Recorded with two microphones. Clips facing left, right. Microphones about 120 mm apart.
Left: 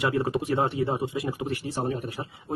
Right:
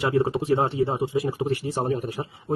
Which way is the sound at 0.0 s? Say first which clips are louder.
Right 3 dB; 30° right (ahead or behind).